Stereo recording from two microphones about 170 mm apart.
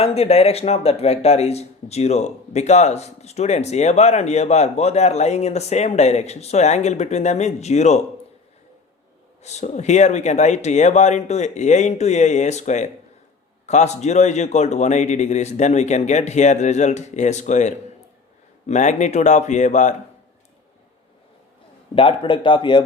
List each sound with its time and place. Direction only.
0.0 s speech: 35° left (ahead or behind)
9.4 s a man's voice: 40° left (ahead or behind)
21.9 s speech: 30° left (ahead or behind)